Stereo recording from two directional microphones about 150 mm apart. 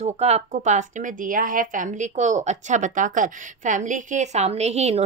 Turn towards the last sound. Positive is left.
turn(degrees=-45)  # may be behind; listen again after turning